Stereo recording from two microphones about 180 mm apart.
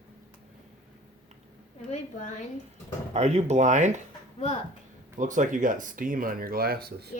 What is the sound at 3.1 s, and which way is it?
Speech, 40° right (ahead or behind).